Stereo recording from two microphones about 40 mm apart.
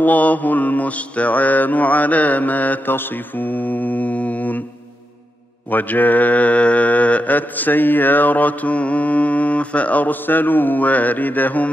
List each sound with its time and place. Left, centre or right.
0.0 s mantra: left
2.9 s mantra: left
5.7 s mantra: left
7.3 s mantra: left